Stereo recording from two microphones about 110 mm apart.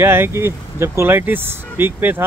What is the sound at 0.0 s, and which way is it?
Speech, 20° right (ahead or behind).